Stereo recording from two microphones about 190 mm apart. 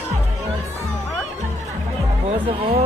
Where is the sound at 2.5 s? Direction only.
30° right (ahead or behind).